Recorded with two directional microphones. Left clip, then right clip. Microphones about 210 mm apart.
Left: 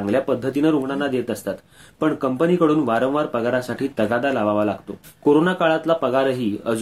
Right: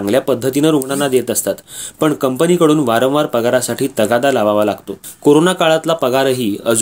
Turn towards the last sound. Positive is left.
turn(degrees=-40)  # may be behind; listen again after turning